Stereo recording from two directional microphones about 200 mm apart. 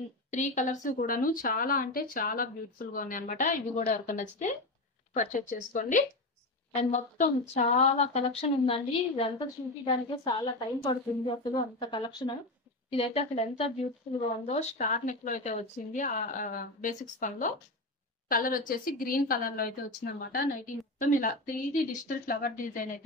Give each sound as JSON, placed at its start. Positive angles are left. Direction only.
{"t": 0.3, "sound": "a woman's voice", "side_deg": 40}